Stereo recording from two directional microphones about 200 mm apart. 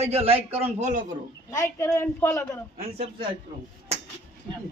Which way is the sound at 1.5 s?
15° left (ahead or behind).